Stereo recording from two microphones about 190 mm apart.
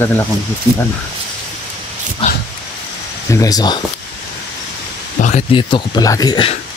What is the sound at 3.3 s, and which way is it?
Speech, 20° left (ahead or behind).